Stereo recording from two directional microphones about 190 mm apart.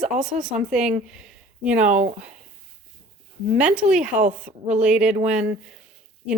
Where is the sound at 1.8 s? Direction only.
35° right (ahead or behind).